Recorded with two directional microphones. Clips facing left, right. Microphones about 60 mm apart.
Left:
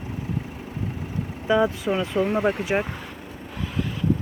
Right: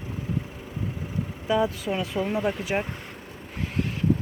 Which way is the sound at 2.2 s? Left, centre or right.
Left.